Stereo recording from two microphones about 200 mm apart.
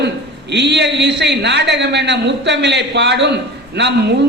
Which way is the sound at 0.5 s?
60° right (ahead or behind).